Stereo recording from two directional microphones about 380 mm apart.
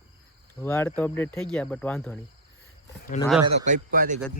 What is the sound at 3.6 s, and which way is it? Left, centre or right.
Speech, right.